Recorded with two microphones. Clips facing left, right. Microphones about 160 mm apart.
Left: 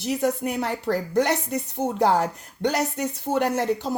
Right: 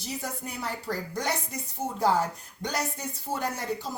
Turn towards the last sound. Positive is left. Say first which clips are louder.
# left 8 dB
turn(degrees=75)  # may be behind; listen again after turning